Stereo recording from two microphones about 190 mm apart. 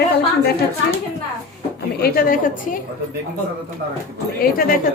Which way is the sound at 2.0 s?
50° left (ahead or behind).